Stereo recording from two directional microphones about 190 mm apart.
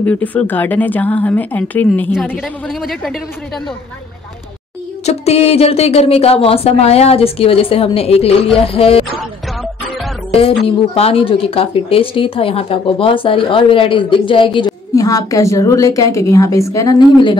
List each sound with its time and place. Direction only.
0.0 s a woman's voice: 10° left (ahead or behind)
5.0 s speech: 35° left (ahead or behind)
10.6 s a woman's voice: 30° left (ahead or behind)